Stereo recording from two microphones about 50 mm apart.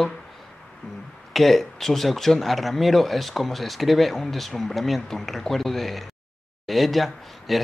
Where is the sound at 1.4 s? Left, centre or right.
Centre.